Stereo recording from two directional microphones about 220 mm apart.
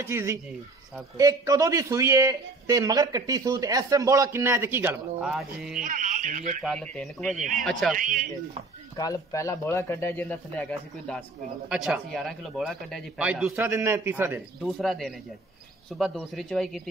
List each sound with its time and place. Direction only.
0.0 s a man's voice: 10° right (ahead or behind)
5.8 s a man's voice: 35° right (ahead or behind)
6.6 s speech: 5° left (ahead or behind)
7.9 s speech: 40° right (ahead or behind)
8.9 s speech: 15° left (ahead or behind)